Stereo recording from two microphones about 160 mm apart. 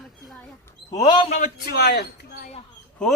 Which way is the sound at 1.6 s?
90° left.